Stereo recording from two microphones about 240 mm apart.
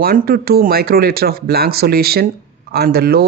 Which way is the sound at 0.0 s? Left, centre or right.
Right.